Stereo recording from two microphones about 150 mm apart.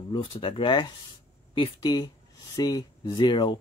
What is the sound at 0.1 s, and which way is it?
Speech, 35° left (ahead or behind).